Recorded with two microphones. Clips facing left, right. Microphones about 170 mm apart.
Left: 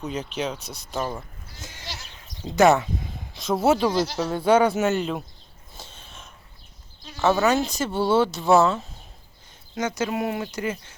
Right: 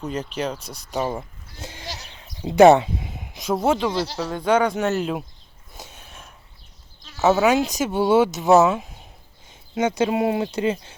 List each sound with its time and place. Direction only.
0.3 s speech: 10° right (ahead or behind)
2.5 s speech: 30° right (ahead or behind)
3.5 s speech: 5° left (ahead or behind)
3.9 s speech: 30° right (ahead or behind)
4.3 s speech: 10° left (ahead or behind)
5.7 s a sound: 15° right (ahead or behind)
7.2 s speech: 15° right (ahead or behind)
9.7 s speech: 25° right (ahead or behind)